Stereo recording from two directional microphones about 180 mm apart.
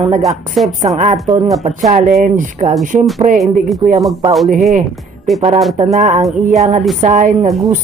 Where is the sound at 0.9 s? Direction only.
40° right (ahead or behind).